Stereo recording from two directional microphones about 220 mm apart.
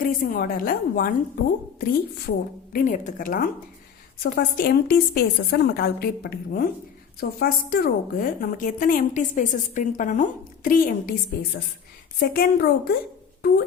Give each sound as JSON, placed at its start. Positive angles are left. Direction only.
{"t": 0.0, "sound": "a woman's voice", "side_deg": 40}
{"t": 12.3, "sound": "a woman's voice", "side_deg": 45}